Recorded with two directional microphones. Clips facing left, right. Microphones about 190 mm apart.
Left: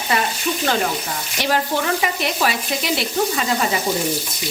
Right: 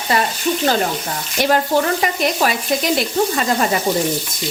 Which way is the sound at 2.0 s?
40° right (ahead or behind).